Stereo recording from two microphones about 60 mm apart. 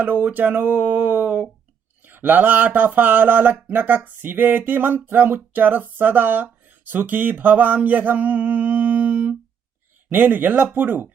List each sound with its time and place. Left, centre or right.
0.0 s speech: right